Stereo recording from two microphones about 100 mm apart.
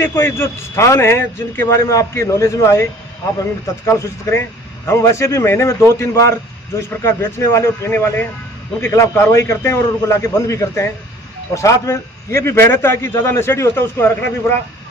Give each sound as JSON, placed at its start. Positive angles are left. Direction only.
{"t": 0.0, "sound": "a man's voice", "side_deg": 25}